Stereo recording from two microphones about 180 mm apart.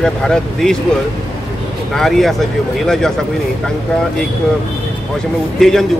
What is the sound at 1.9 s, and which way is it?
Speech, centre (ahead or behind).